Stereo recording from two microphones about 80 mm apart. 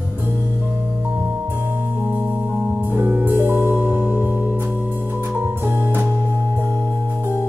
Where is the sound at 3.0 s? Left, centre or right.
Right.